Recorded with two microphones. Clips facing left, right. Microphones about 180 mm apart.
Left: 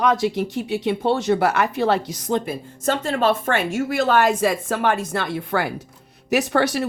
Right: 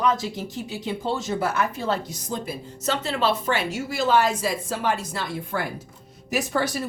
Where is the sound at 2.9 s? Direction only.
45° left (ahead or behind).